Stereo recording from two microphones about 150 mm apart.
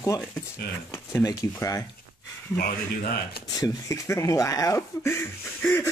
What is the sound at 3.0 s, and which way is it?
Speech, 90° left.